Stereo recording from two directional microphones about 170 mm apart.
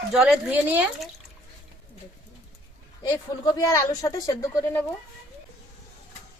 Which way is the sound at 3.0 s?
25° left (ahead or behind).